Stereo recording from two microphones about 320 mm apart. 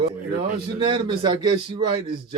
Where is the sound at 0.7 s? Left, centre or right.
Centre.